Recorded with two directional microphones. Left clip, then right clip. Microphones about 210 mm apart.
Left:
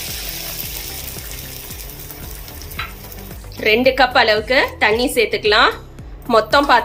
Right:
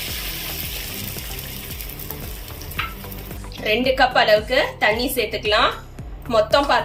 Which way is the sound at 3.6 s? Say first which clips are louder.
Left 4 dB; 10° left (ahead or behind).